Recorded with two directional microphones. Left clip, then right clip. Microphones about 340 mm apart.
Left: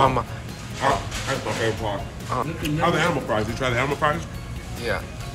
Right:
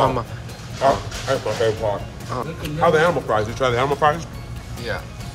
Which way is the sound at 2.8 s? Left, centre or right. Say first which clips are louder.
Right 6 dB; right.